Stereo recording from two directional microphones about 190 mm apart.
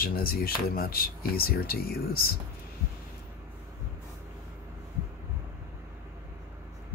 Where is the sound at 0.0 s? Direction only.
50° left (ahead or behind).